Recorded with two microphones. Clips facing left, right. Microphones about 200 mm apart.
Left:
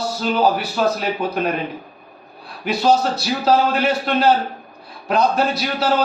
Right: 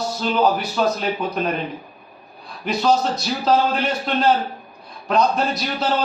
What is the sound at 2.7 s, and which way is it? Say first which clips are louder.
A man's voice: left 2 dB; 5° left (ahead or behind).